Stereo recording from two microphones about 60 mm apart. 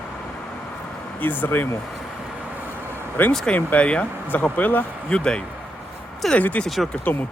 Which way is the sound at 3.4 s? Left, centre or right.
Left.